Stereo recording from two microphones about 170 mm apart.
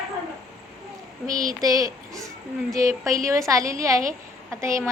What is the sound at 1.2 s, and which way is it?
Speech, 20° right (ahead or behind).